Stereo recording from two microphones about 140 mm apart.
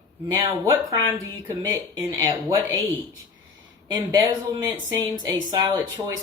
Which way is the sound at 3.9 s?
25° right (ahead or behind).